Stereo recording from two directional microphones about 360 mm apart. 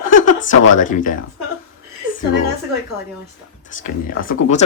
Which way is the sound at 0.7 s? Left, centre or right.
Left.